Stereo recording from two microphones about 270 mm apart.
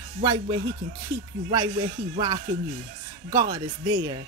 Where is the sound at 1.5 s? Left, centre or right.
Centre.